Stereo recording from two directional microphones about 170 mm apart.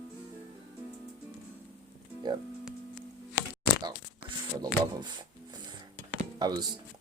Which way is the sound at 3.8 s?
25° right (ahead or behind).